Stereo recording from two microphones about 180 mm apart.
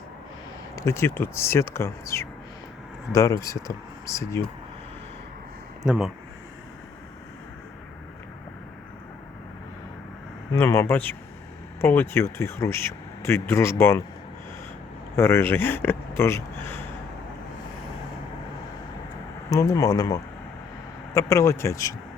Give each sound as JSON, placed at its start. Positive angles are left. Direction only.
{"t": 0.8, "sound": "speech", "side_deg": 15}
{"t": 5.8, "sound": "speech", "side_deg": -5}
{"t": 10.5, "sound": "speech", "side_deg": 15}
{"t": 15.1, "sound": "speech", "side_deg": 15}
{"t": 19.5, "sound": "speech", "side_deg": 15}